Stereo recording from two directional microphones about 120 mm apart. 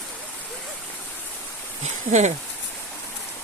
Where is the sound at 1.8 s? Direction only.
70° right (ahead or behind).